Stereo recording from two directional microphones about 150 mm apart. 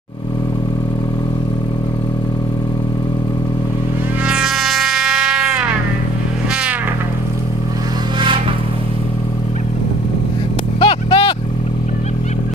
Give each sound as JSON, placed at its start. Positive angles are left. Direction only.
{"t": 4.3, "sound": "music", "side_deg": -5}
{"t": 10.8, "sound": "vehicle", "side_deg": 35}